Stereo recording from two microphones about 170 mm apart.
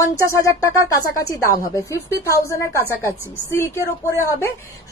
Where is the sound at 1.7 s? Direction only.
20° left (ahead or behind).